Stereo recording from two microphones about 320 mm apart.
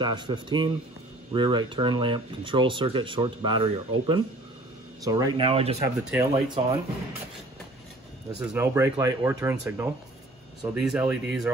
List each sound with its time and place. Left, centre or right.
0.0 s speech: centre
8.5 s speech: centre